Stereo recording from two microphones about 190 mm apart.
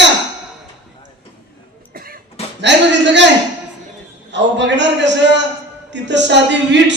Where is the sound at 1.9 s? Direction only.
50° right (ahead or behind).